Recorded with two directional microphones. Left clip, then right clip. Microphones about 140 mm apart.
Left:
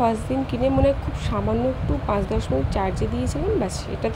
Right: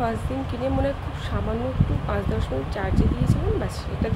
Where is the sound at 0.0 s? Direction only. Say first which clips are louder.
Left 5 dB; 40° left (ahead or behind).